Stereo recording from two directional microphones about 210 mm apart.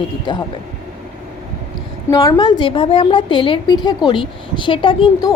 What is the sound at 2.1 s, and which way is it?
A woman's voice, 15° left (ahead or behind).